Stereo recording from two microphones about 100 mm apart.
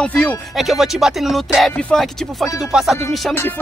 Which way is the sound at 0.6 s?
5° right (ahead or behind).